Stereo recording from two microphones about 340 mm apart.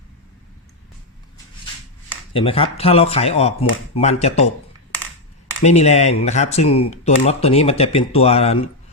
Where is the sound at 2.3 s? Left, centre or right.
Centre.